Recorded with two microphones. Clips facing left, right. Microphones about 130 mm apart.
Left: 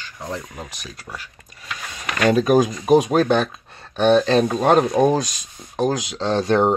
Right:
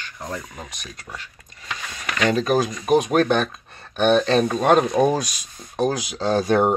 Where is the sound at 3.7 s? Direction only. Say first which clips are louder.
Left 2 dB; centre (ahead or behind).